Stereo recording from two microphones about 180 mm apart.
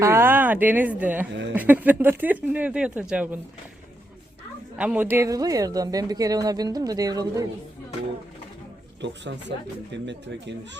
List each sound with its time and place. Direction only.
0.0 s speech: 15° right (ahead or behind)
1.3 s speech: 80° right
1.5 s speech: 10° right (ahead or behind)
4.8 s speech: 10° right (ahead or behind)
9.0 s speech: 80° right